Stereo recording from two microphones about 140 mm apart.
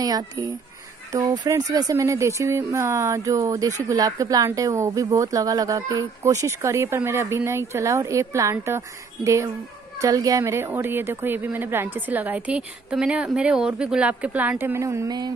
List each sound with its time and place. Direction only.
0.0 s speech: 25° right (ahead or behind)